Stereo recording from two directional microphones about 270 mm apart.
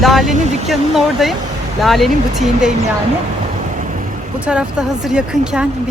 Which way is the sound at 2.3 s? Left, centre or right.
Right.